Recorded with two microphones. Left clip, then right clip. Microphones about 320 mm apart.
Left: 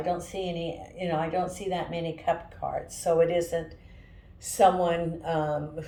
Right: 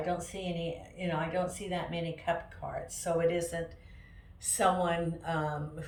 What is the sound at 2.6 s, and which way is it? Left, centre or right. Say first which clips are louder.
Speech: left 7 dB; right.